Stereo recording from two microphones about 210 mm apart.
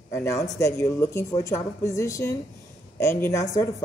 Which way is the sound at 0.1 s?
15° left (ahead or behind).